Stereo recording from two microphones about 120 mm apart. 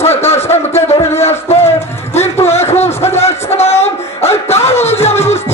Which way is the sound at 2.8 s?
20° left (ahead or behind).